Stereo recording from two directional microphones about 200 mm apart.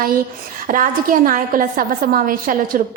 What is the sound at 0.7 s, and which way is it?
A woman's voice, 45° right (ahead or behind).